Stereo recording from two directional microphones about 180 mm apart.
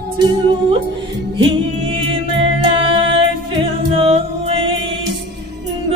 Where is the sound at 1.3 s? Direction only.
30° right (ahead or behind).